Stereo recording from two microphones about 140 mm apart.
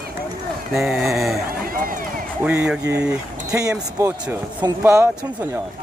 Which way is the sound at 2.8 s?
20° right (ahead or behind).